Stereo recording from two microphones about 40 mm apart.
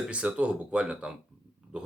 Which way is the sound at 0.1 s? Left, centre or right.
Right.